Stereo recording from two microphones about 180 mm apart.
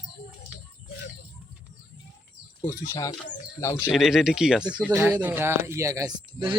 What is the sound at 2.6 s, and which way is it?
Speech, 15° left (ahead or behind).